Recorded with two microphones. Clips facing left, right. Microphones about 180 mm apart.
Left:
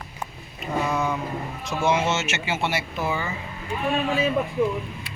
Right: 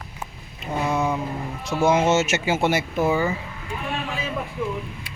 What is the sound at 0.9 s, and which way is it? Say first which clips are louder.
Vehicle: right 4 dB; 25° right (ahead or behind).